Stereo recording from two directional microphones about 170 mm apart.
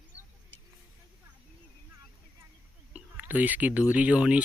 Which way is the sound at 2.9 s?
10° right (ahead or behind).